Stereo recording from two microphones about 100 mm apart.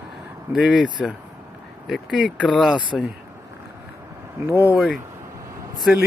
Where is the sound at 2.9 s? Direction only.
5° left (ahead or behind).